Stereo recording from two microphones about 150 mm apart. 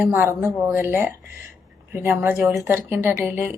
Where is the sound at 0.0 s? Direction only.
15° right (ahead or behind).